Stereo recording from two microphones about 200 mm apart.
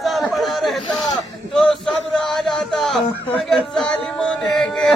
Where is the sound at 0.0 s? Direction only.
Centre (ahead or behind).